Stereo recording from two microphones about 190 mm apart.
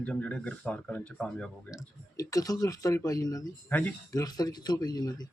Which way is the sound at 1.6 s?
20° left (ahead or behind).